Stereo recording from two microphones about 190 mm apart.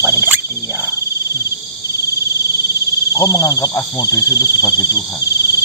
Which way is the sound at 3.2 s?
20° left (ahead or behind).